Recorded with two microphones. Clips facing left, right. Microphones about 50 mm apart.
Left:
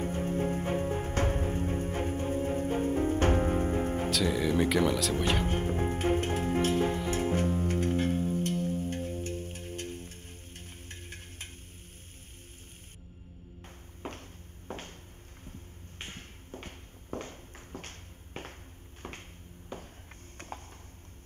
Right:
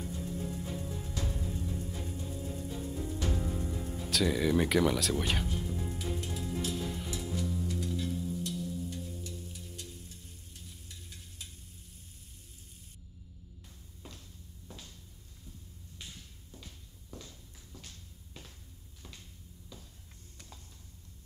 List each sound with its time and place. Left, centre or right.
0.0 s music: left
4.1 s speech: centre
5.4 s music: left
14.0 s a sound: left
16.0 s walk: left
19.0 s a sound: left